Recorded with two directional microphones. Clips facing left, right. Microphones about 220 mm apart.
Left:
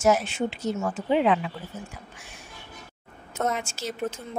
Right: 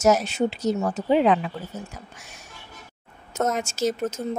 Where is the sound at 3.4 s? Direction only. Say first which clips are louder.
Right 5 dB; 45° right (ahead or behind).